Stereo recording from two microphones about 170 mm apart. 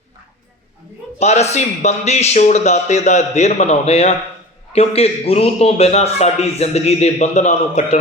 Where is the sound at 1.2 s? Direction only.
40° left (ahead or behind).